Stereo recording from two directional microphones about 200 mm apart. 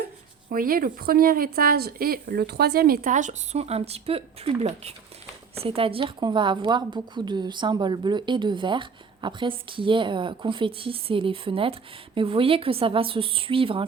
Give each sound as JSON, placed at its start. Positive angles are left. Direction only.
{"t": 0.5, "sound": "a woman's voice", "side_deg": -45}